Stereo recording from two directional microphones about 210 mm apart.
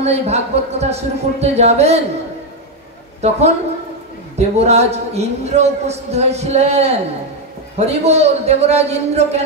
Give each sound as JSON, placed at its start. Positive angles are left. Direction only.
{"t": 0.0, "sound": "speech", "side_deg": -30}
{"t": 3.2, "sound": "a woman's voice", "side_deg": -30}